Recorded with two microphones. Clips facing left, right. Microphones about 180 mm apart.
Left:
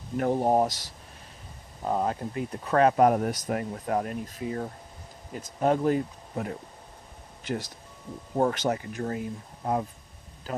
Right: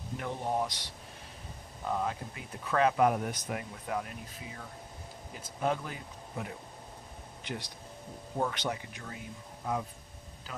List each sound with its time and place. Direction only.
0.2 s speech: 40° left (ahead or behind)
1.8 s speech: 30° left (ahead or behind)
8.4 s speech: 45° left (ahead or behind)